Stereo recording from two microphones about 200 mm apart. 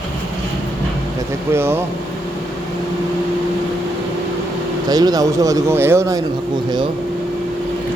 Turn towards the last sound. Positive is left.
turn(degrees=-15)  # may be behind; listen again after turning